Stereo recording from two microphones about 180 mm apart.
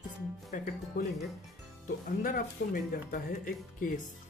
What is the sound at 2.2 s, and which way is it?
Speech, 50° left (ahead or behind).